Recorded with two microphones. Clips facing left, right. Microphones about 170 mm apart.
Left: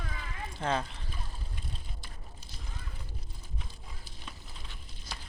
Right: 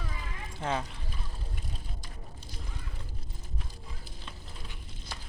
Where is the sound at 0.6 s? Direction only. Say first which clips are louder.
Left 1 dB; 15° right (ahead or behind).